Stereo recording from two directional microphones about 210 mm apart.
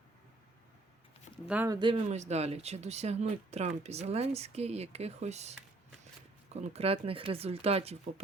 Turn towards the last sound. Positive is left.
turn(degrees=-30)  # may be behind; listen again after turning